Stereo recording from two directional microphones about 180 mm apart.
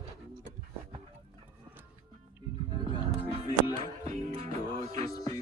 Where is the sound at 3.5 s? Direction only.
25° left (ahead or behind).